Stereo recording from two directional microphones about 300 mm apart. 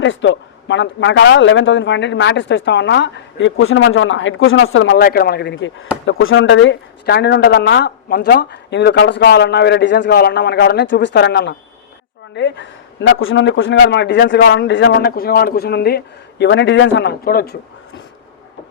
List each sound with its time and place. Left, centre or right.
0.0 s a man's voice: left